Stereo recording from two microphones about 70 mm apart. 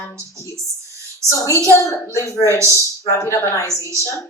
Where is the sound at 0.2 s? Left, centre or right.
Left.